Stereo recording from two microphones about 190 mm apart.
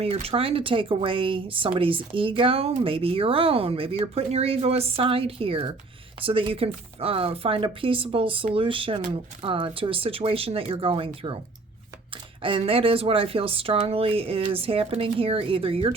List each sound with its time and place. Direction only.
0.0 s speech: 30° right (ahead or behind)